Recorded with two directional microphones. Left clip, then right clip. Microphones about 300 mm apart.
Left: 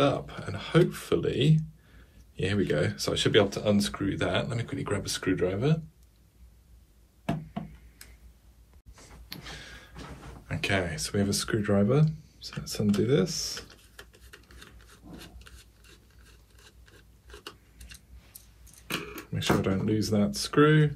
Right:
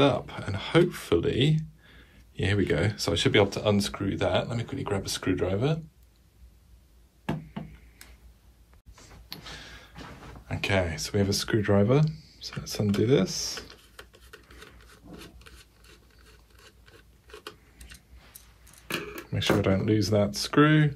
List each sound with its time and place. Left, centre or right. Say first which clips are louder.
0.0 s speech: right 2 dB; right
8.9 s a sound: right 1 dB; centre
10.5 s speech: right 2 dB; centre
14.9 s wood: right 1 dB; centre
17.3 s a sound: right 2 dB; centre
19.3 s speech: right 3 dB; centre